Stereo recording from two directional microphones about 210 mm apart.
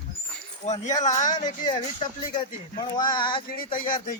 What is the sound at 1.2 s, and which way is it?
Speech, 20° left (ahead or behind).